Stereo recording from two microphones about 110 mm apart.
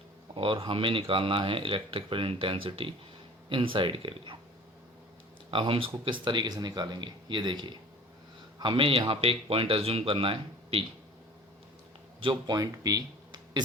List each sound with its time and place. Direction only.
0.3 s speech: 50° right (ahead or behind)
5.5 s speech: 50° right (ahead or behind)
12.3 s speech: 35° right (ahead or behind)